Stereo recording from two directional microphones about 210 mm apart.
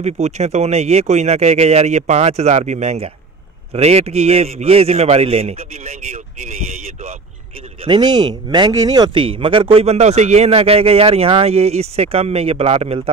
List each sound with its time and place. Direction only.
0.0 s speech: 30° right (ahead or behind)
7.8 s speech: 20° right (ahead or behind)